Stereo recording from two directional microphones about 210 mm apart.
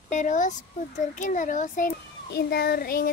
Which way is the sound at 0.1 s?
35° left (ahead or behind).